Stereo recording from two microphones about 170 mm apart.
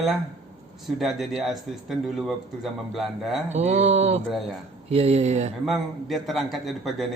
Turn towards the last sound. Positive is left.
turn(degrees=0)  # may be behind; listen again after turning